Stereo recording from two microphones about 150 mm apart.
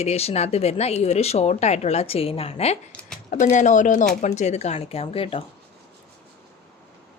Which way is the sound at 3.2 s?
55° left (ahead or behind).